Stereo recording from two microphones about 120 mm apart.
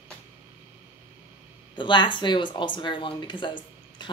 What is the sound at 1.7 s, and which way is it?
A woman's voice, 40° left (ahead or behind).